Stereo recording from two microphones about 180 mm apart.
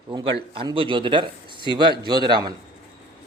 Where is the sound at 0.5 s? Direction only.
30° right (ahead or behind).